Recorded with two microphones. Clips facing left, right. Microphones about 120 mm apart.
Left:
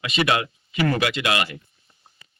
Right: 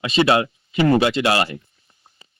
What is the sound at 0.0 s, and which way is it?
Speech, 30° right (ahead or behind).